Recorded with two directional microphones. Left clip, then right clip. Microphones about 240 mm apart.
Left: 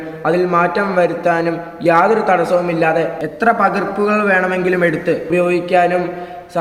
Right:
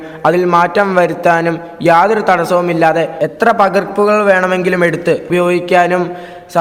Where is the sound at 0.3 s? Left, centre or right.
Right.